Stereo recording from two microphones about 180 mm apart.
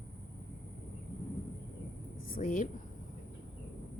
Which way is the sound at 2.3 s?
50° left (ahead or behind).